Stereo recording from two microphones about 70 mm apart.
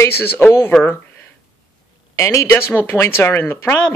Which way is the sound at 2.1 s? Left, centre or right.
Left.